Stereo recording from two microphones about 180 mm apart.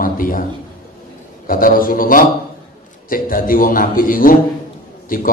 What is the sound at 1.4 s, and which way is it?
A man's voice, 50° left (ahead or behind).